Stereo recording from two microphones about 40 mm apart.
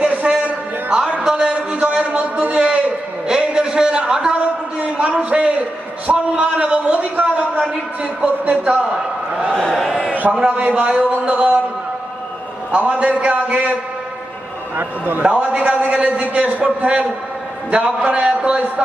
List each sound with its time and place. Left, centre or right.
0.0 s a sound: right
2.3 s a man's voice: right
2.6 s a sound: right
4.8 s a man's voice: right
9.5 s speech: left
9.7 s a man's voice: centre
10.4 s a man's voice: right
12.7 s a man's voice: right
14.8 s a man's voice: right
15.2 s a man's voice: right